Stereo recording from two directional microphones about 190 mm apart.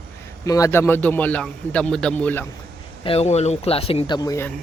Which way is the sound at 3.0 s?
30° left (ahead or behind).